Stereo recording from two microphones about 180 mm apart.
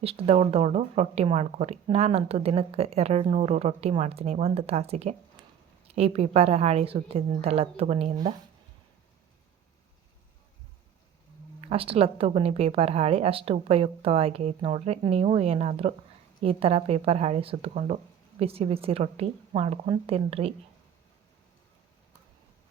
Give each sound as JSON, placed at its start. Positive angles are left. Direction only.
{"t": 0.0, "sound": "speech", "side_deg": -35}
{"t": 11.6, "sound": "speech", "side_deg": -30}